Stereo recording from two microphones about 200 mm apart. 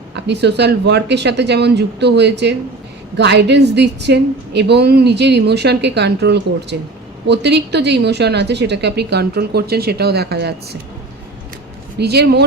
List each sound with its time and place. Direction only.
0.3 s a woman's voice: 55° right (ahead or behind)
11.9 s a woman's voice: 55° right (ahead or behind)